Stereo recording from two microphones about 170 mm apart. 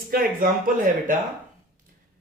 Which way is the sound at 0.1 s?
60° right (ahead or behind).